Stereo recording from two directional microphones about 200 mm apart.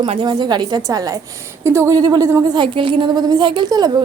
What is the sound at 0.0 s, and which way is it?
A woman's voice, 25° right (ahead or behind).